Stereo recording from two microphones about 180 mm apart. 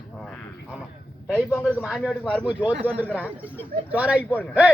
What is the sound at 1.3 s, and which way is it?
Speech, 10° right (ahead or behind).